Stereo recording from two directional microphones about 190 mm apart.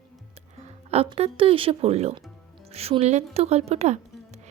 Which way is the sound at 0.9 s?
30° right (ahead or behind).